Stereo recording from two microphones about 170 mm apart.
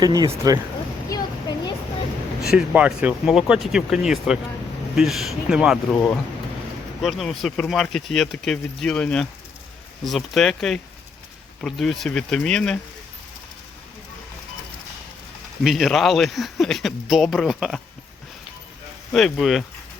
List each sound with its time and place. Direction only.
0.0 s speech: 20° right (ahead or behind)
1.1 s a sound: 20° left (ahead or behind)
2.4 s speech: 5° right (ahead or behind)
5.9 s speech: 10° left (ahead or behind)
15.6 s speech: centre (ahead or behind)
19.1 s speech: centre (ahead or behind)